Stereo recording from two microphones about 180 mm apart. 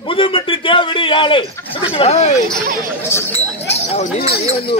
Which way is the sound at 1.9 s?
35° left (ahead or behind).